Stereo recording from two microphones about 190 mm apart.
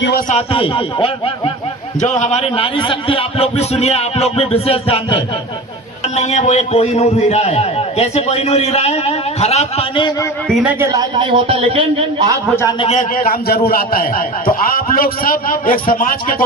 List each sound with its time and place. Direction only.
0.3 s a man's voice: 30° left (ahead or behind)
2.0 s a man's voice: 40° left (ahead or behind); by 10.2 s 25° left (ahead or behind)
10.5 s a man's voice: 5° right (ahead or behind)
11.2 s a man's voice: 30° right (ahead or behind)
12.8 s a man's voice: 40° left (ahead or behind)